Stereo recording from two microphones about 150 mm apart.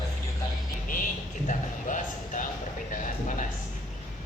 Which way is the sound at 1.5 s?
55° left (ahead or behind).